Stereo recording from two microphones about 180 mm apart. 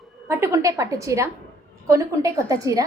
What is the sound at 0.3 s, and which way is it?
A woman's voice, 15° right (ahead or behind).